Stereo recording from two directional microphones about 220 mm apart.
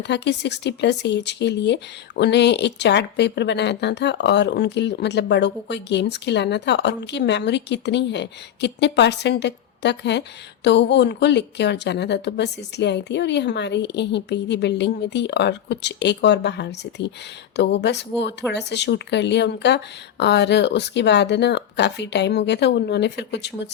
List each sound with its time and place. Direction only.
0.0 s speech: 50° left (ahead or behind)